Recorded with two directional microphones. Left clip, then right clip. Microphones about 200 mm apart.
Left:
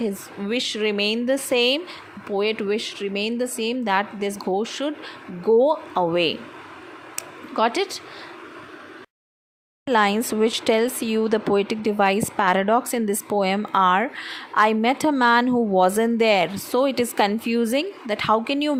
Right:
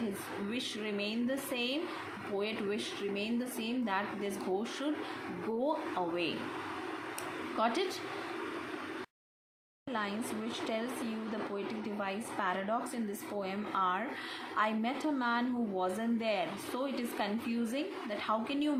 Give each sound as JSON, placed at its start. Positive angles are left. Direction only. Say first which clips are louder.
{"t": 0.5, "sound": "speech", "louder": "left 17 dB", "side_deg": 45}
{"t": 7.5, "sound": "speech", "louder": "left 11 dB", "side_deg": 45}
{"t": 9.8, "sound": "speech", "louder": "left 18 dB", "side_deg": 50}